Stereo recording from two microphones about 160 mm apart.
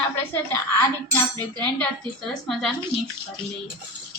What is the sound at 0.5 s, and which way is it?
Speech, 15° left (ahead or behind).